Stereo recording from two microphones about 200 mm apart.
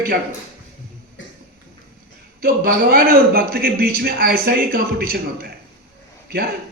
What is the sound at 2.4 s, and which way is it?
A man's voice, 50° right (ahead or behind).